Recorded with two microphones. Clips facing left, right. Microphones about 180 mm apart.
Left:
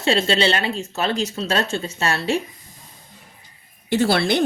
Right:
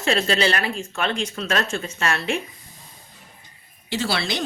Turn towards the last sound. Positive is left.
turn(degrees=55)  # may be behind; listen again after turning